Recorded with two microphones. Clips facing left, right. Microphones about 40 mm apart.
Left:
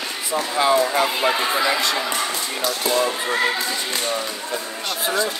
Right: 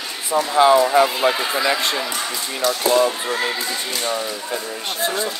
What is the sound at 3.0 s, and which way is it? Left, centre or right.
Speech, centre.